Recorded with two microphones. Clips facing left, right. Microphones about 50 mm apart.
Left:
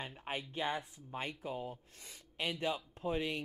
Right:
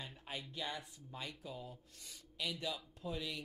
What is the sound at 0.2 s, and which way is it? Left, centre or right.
Speech, left.